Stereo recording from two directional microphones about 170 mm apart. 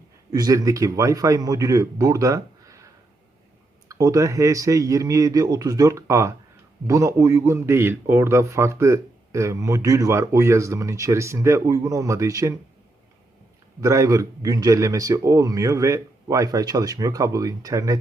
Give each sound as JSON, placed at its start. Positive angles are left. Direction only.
{"t": 0.3, "sound": "a man's voice", "side_deg": -20}
{"t": 3.8, "sound": "a man's voice", "side_deg": -20}
{"t": 13.8, "sound": "a man's voice", "side_deg": -20}